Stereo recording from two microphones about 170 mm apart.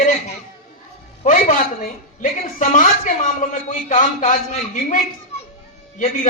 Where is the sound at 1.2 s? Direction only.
45° left (ahead or behind).